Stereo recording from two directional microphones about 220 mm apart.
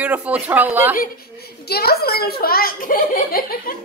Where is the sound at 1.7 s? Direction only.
45° left (ahead or behind).